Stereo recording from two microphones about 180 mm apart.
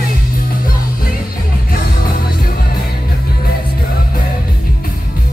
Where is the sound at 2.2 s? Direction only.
55° left (ahead or behind).